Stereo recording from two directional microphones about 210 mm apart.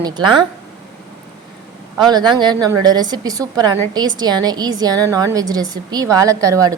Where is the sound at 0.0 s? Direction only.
20° right (ahead or behind).